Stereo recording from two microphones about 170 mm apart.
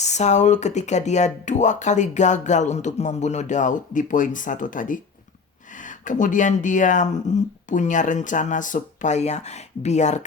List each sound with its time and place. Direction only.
0.0 s speech: 40° left (ahead or behind)